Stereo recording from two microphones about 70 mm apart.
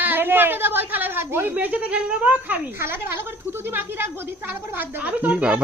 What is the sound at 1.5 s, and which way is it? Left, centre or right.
Speech, centre.